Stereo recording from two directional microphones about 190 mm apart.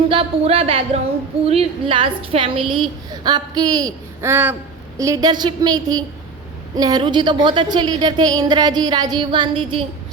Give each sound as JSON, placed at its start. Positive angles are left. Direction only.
{"t": 0.1, "sound": "a woman's voice", "side_deg": -30}